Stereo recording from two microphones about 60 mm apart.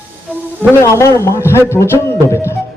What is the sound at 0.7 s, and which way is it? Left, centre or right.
A man's voice, left.